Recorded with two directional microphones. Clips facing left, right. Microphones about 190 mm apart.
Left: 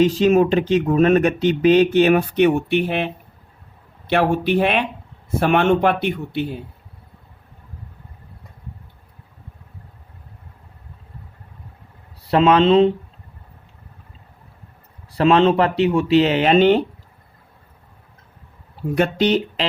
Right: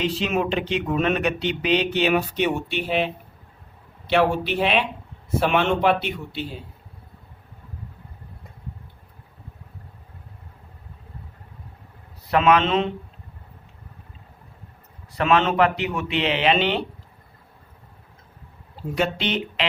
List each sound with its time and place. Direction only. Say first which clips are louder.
0.0 s speech: left 9 dB; 40° left (ahead or behind)
12.3 s speech: left 5 dB; 30° left (ahead or behind)
15.2 s speech: left 5 dB; 30° left (ahead or behind)
18.9 s speech: left 7 dB; 50° left (ahead or behind)